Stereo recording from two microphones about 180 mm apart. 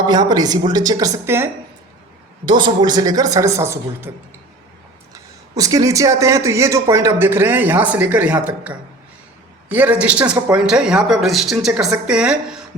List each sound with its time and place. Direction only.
0.1 s speech: 25° right (ahead or behind)
2.5 s speech: 25° right (ahead or behind)
5.1 s speech: 20° right (ahead or behind)